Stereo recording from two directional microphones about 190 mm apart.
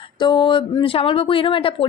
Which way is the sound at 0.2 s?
25° left (ahead or behind).